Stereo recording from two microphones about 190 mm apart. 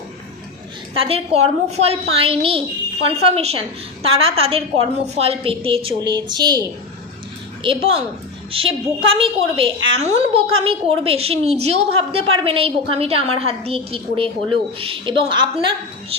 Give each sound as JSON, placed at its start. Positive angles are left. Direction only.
{"t": 0.9, "sound": "a woman's voice", "side_deg": -30}